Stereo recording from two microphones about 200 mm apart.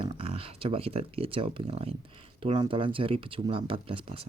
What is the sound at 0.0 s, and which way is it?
Speech, 30° right (ahead or behind).